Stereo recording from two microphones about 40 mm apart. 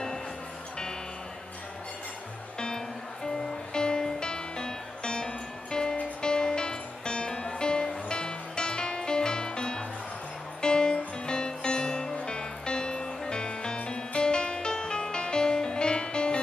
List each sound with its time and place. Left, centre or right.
3.7 s music: centre